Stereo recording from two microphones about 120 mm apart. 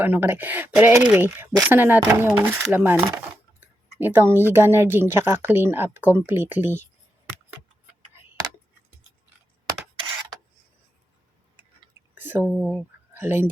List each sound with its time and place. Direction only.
0.0 s speech: 15° right (ahead or behind)
12.1 s a sound: 15° right (ahead or behind)
12.5 s speech: 10° left (ahead or behind)
13.1 s speech: 20° right (ahead or behind)